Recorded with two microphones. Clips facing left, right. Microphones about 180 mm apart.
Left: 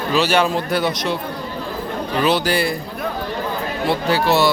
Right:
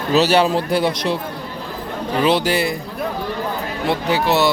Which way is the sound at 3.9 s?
15° right (ahead or behind).